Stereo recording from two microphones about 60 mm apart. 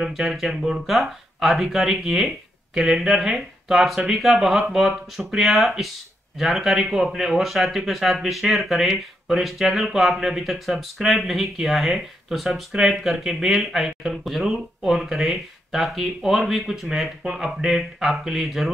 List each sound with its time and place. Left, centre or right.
0.0 s speech: centre